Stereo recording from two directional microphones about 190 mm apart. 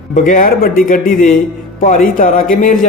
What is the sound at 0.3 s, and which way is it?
Speech, 45° left (ahead or behind).